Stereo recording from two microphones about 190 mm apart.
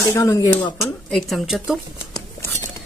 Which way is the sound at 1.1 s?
Centre (ahead or behind).